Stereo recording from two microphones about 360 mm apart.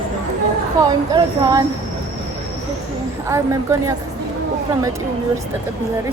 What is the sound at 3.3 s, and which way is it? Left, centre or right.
Speech, centre.